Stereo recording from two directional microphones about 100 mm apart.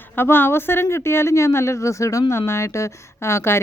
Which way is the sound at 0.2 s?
20° left (ahead or behind).